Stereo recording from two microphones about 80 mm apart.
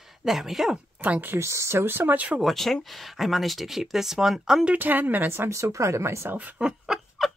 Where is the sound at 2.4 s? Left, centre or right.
Centre; by 6.4 s right.